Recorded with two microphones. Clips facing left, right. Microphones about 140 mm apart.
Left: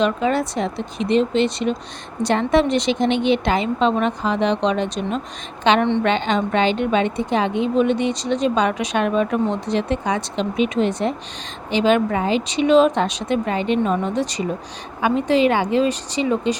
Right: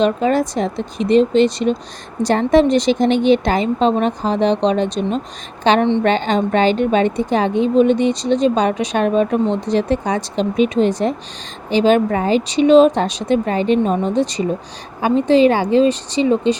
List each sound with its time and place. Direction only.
0.0 s a woman's voice: 40° right (ahead or behind)